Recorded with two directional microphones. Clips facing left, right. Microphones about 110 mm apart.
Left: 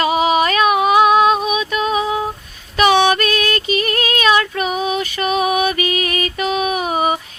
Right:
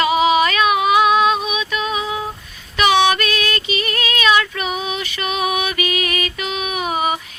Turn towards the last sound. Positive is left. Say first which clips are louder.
# left 3 dB
turn(degrees=40)  # may be behind; listen again after turning